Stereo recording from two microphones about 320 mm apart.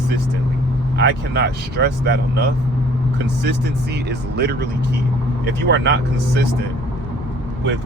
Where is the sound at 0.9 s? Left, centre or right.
Right.